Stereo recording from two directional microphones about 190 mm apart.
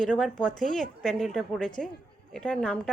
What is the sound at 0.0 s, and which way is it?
Speech, 5° left (ahead or behind).